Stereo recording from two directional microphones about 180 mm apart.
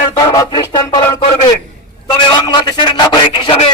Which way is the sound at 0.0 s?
30° left (ahead or behind).